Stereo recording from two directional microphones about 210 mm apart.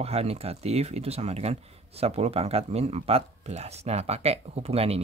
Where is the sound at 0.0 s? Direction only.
30° right (ahead or behind).